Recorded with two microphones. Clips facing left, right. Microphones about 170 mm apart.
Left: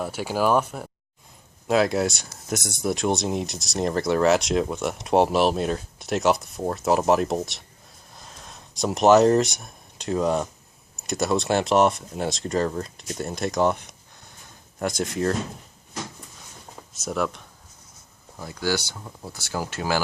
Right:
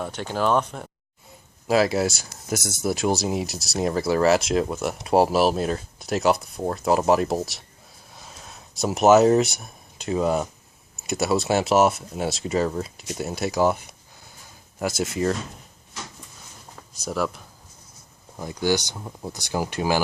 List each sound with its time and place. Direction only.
0.0 s speech: 5° left (ahead or behind)
17.0 s speech: centre (ahead or behind)
18.3 s speech: 20° right (ahead or behind)